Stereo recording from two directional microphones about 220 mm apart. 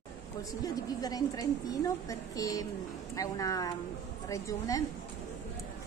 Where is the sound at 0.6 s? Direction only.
15° left (ahead or behind).